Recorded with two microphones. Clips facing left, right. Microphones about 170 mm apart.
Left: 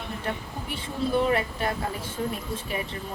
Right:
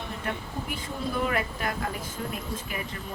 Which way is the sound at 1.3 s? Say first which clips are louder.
Left 4 dB; 30° left (ahead or behind).